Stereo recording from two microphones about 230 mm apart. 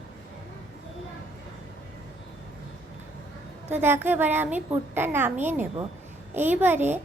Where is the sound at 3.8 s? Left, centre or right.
Centre.